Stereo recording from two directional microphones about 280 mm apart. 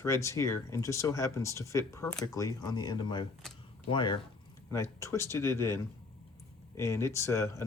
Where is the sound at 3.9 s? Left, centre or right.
Centre.